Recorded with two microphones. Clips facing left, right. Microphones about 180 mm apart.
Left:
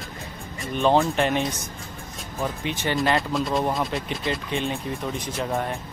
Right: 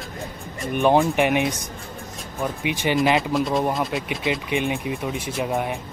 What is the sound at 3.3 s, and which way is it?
Speech, centre (ahead or behind).